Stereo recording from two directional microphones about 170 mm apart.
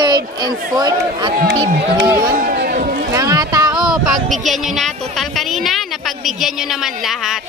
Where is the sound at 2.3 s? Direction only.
55° right (ahead or behind).